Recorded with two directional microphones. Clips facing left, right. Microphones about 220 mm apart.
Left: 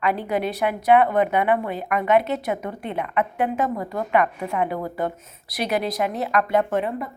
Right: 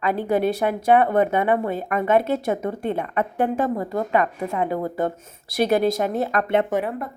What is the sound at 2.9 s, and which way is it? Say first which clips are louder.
A woman's voice: left 2 dB; 35° right (ahead or behind).